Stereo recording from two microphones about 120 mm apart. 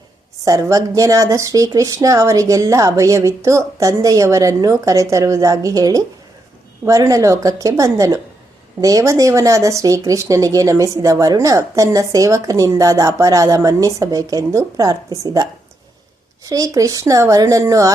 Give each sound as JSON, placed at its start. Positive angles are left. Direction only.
{"t": 0.4, "sound": "speech", "side_deg": -30}
{"t": 16.5, "sound": "speech", "side_deg": -30}